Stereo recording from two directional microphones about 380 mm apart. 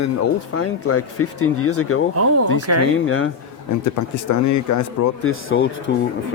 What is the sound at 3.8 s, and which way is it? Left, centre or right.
Speech, left.